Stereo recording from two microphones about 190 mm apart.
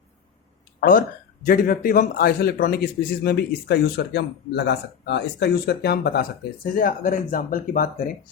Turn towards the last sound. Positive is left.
turn(degrees=45)  # may be behind; listen again after turning